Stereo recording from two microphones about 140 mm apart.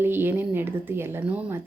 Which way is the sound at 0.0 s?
15° right (ahead or behind).